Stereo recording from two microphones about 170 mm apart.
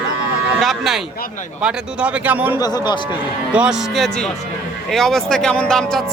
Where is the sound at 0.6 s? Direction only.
Centre (ahead or behind).